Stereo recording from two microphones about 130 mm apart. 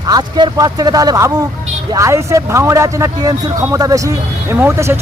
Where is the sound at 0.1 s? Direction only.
35° right (ahead or behind).